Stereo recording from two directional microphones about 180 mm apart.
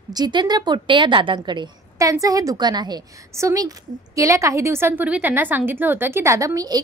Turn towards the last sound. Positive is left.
turn(degrees=-20)  # may be behind; listen again after turning